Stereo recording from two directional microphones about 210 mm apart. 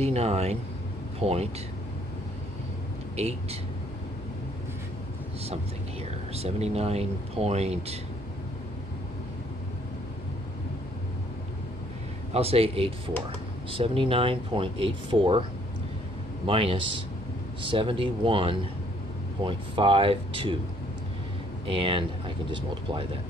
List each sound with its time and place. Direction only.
0.0 s speech: 30° right (ahead or behind)
3.2 s speech: 30° right (ahead or behind)
6.3 s speech: 30° right (ahead or behind)
12.4 s speech: 30° right (ahead or behind)
16.4 s speech: 25° right (ahead or behind)
21.6 s speech: 25° right (ahead or behind)